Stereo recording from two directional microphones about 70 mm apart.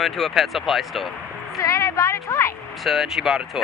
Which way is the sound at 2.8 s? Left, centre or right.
Centre.